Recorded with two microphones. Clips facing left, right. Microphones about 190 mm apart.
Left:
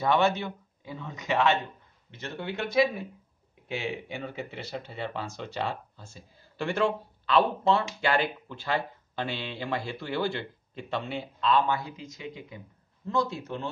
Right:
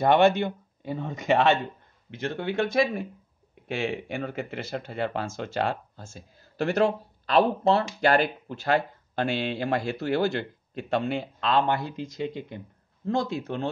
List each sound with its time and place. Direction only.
0.0 s speech: 60° right (ahead or behind)
11.4 s speech: 70° right (ahead or behind)